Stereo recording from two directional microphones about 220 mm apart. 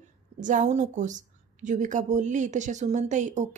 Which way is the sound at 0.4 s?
35° right (ahead or behind).